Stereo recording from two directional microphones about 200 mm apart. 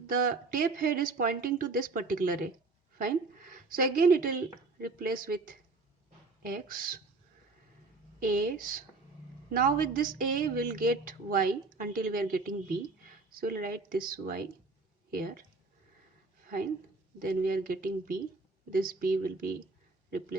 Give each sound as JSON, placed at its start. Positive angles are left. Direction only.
{"t": 0.3, "sound": "a woman's voice", "side_deg": -45}
{"t": 8.2, "sound": "a woman's voice", "side_deg": -45}
{"t": 17.2, "sound": "a woman's voice", "side_deg": -45}